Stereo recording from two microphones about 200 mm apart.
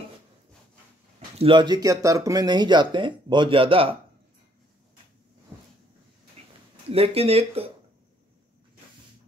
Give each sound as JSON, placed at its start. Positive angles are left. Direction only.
{"t": 1.4, "sound": "speech", "side_deg": -25}
{"t": 6.4, "sound": "a sound", "side_deg": -30}
{"t": 6.9, "sound": "speech", "side_deg": -30}